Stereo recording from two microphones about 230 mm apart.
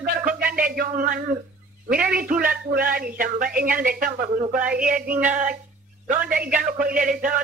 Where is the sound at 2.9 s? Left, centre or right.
Right.